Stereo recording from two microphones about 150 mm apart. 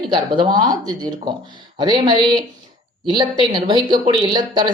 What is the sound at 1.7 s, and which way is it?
Speech, 30° right (ahead or behind).